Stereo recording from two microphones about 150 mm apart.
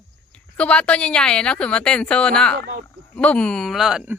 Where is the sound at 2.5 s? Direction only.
90° right.